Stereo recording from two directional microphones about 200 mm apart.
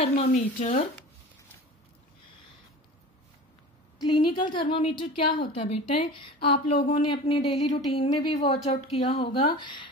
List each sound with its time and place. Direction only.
0.0 s a woman's voice: 35° left (ahead or behind)
4.0 s a woman's voice: 25° left (ahead or behind)